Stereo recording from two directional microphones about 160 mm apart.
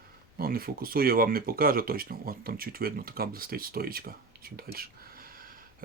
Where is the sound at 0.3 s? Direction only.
65° right (ahead or behind).